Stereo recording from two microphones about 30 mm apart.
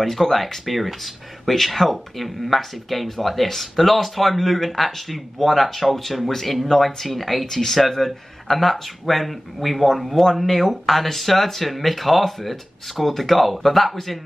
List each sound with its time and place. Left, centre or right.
0.0 s speech: centre